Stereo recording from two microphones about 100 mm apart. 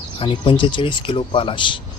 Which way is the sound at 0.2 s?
55° left (ahead or behind).